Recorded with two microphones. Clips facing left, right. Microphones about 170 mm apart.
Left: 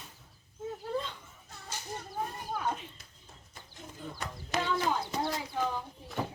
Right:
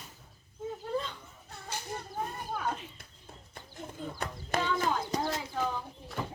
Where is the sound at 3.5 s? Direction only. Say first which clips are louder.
Right 5 dB; 50° right (ahead or behind).